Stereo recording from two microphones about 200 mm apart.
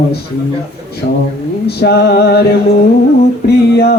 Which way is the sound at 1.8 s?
55° left (ahead or behind).